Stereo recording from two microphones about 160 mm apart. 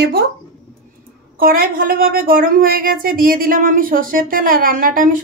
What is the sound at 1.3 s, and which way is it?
A woman's voice, 65° right (ahead or behind).